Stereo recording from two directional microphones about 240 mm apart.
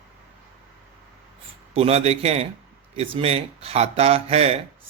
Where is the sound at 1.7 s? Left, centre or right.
Right.